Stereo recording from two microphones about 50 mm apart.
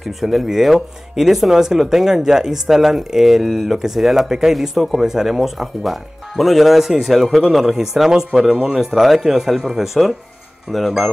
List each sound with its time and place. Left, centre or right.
0.0 s speech: centre